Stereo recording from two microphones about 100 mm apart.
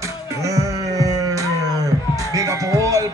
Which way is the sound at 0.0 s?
30° right (ahead or behind).